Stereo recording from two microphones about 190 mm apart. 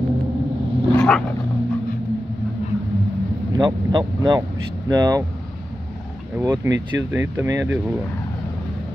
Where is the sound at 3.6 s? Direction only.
20° right (ahead or behind).